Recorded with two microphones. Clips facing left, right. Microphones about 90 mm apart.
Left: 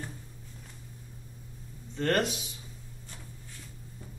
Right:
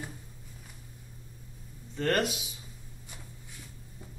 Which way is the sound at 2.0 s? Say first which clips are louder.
Even; centre (ahead or behind).